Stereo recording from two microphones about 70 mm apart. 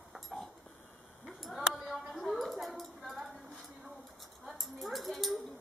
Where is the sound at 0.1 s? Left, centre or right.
Centre.